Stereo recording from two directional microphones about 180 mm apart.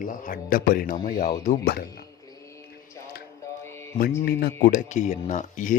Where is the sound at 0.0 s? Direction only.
50° left (ahead or behind).